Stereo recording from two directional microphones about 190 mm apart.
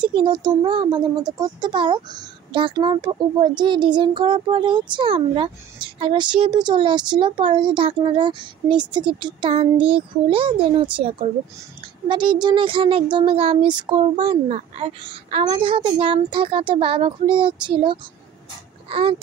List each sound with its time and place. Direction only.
0.0 s speech: 25° right (ahead or behind)